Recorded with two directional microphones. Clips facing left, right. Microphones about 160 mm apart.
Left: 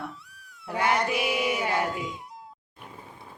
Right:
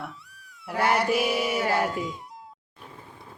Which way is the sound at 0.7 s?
5° right (ahead or behind).